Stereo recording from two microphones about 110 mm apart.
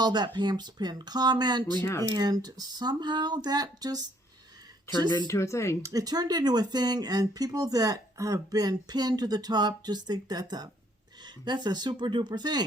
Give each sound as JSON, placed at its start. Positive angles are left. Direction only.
{"t": 0.0, "sound": "speech", "side_deg": -40}
{"t": 1.8, "sound": "speech", "side_deg": 25}
{"t": 2.0, "sound": "speech", "side_deg": -40}
{"t": 4.9, "sound": "speech", "side_deg": 25}
{"t": 5.8, "sound": "speech", "side_deg": -35}